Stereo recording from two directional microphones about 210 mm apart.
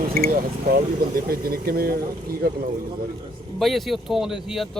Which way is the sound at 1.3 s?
45° right (ahead or behind).